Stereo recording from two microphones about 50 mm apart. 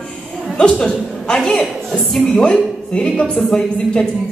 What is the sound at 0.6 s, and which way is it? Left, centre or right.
Speech, centre.